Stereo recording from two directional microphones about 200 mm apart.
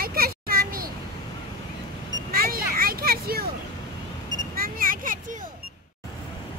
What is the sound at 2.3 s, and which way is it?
Children playing, 50° right (ahead or behind).